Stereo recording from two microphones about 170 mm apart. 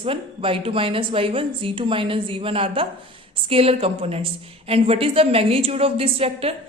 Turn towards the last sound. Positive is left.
turn(degrees=-35)  # may be behind; listen again after turning